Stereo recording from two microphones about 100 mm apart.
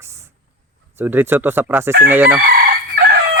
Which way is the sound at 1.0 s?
20° right (ahead or behind).